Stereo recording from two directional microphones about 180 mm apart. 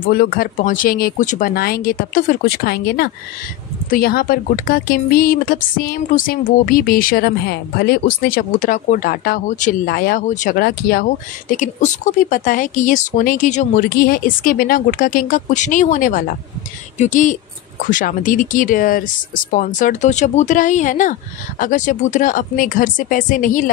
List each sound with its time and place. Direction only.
0.0 s speech: 55° left (ahead or behind)
10.2 s speech: 45° left (ahead or behind)
10.6 s speech: 55° left (ahead or behind)